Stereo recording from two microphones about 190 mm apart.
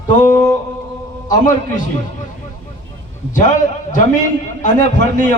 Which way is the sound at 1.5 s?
40° left (ahead or behind).